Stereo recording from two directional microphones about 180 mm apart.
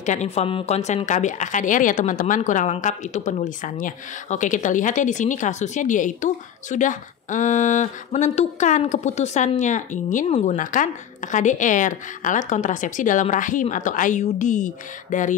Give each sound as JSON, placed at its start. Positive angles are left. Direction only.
{"t": 0.0, "sound": "speech", "side_deg": 40}